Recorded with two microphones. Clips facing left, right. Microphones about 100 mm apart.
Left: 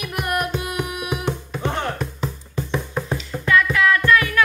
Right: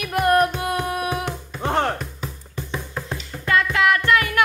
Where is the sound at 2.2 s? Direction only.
25° left (ahead or behind).